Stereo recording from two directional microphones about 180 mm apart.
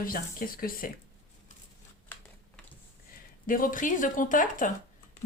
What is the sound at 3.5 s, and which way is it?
Speech, 50° left (ahead or behind).